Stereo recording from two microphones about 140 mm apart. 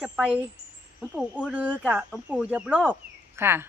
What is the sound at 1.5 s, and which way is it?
Speech, 10° right (ahead or behind).